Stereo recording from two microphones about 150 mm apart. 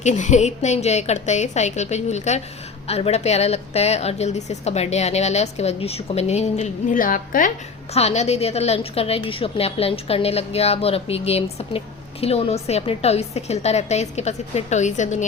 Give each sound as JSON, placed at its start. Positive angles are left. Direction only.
{"t": 0.0, "sound": "a woman's voice", "side_deg": 50}
{"t": 6.9, "sound": "a woman's voice", "side_deg": 65}
{"t": 7.9, "sound": "a woman's voice", "side_deg": 45}